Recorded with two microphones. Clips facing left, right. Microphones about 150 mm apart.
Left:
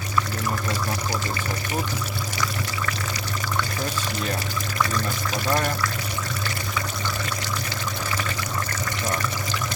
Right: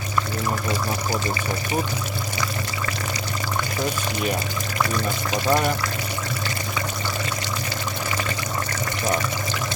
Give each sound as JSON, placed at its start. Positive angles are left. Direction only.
{"t": 5.3, "sound": "speech", "side_deg": -15}